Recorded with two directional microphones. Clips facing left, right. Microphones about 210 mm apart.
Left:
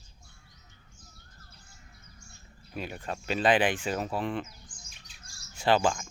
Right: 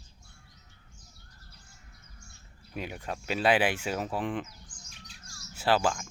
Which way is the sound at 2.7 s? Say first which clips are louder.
Even; 10° right (ahead or behind).